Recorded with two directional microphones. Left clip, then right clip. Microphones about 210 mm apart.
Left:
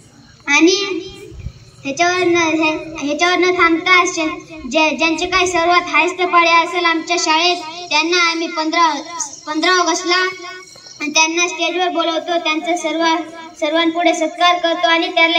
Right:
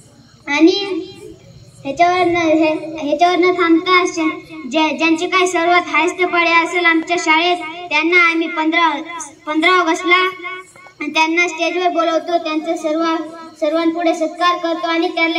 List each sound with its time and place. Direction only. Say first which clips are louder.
0.5 s a sound: left 1 dB; 35° left (ahead or behind)
1.9 s speech: right 1 dB; 35° left (ahead or behind)
7.2 s speech: right 1 dB; 35° left (ahead or behind)